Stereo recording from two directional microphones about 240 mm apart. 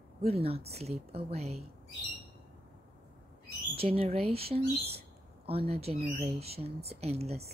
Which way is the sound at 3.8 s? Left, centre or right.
Right.